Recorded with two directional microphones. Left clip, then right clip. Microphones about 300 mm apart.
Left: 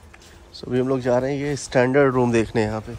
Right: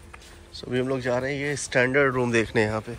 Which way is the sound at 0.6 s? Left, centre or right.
Centre.